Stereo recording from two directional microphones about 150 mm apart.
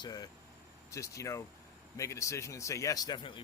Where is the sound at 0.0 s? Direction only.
25° left (ahead or behind).